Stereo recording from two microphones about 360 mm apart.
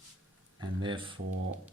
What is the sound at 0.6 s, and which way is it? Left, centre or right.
Speech, centre.